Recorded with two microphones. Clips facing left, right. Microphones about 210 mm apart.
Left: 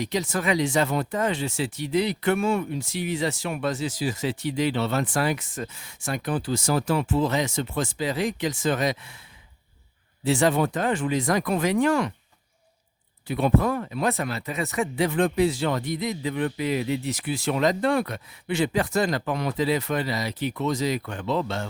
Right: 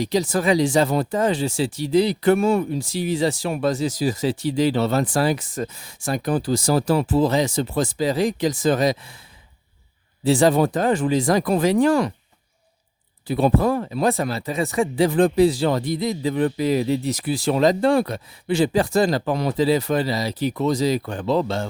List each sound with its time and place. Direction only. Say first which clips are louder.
0.0 s speech: right 6 dB; 35° right (ahead or behind)
10.2 s speech: right 5 dB; 35° right (ahead or behind)
13.2 s speech: right 4 dB; 35° right (ahead or behind)